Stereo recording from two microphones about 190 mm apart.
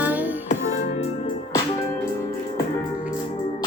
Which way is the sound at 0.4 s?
40° left (ahead or behind).